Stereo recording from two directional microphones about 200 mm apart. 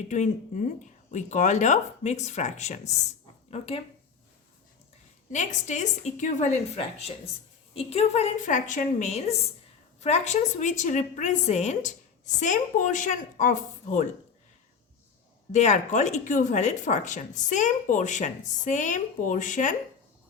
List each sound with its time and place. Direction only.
0.1 s speech: 35° left (ahead or behind)
5.3 s speech: 40° left (ahead or behind)
15.5 s speech: 35° left (ahead or behind)